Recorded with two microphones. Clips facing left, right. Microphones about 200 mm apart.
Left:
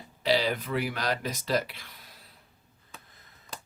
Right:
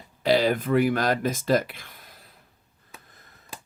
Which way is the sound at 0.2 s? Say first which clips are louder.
Right 5 dB; 50° right (ahead or behind).